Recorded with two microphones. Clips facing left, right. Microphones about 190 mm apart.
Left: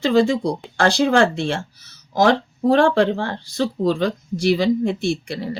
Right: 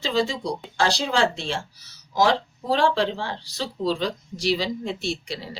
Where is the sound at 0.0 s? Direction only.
55° left (ahead or behind).